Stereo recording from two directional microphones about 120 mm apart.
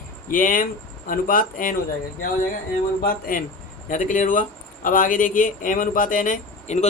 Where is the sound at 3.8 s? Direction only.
90° left.